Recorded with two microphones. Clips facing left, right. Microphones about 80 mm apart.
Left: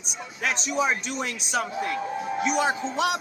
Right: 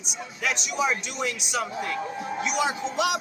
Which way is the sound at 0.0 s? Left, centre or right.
Left.